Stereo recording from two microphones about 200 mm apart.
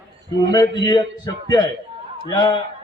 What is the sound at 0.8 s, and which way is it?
A man's voice, 20° left (ahead or behind).